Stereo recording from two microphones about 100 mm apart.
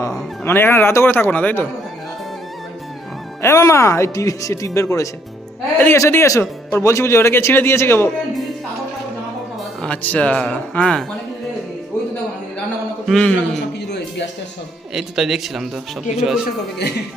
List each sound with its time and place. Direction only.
0.4 s a man's voice: 25° left (ahead or behind)
3.4 s a man's voice: 30° left (ahead or behind)
9.8 s speech: 15° left (ahead or behind)
13.1 s speech: 5° left (ahead or behind)
14.9 s speech: 5° right (ahead or behind)